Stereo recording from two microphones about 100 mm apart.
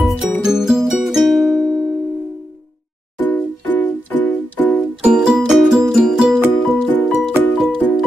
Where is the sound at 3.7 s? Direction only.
20° left (ahead or behind).